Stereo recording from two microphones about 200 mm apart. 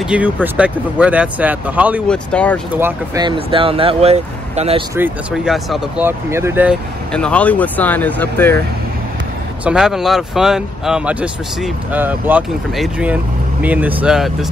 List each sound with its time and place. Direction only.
0.1 s speech: 5° right (ahead or behind)
2.0 s speech: 5° left (ahead or behind)
2.8 s speech: 20° right (ahead or behind)
5.3 s speech: centre (ahead or behind)
7.1 s speech: 5° left (ahead or behind)
9.7 s speech: 5° right (ahead or behind)